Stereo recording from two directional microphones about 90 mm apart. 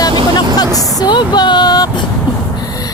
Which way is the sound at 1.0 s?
55° left (ahead or behind).